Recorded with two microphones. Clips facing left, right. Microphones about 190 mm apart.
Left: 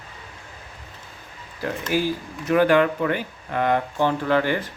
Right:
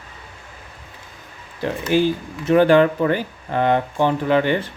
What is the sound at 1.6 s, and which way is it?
Speech, 25° right (ahead or behind).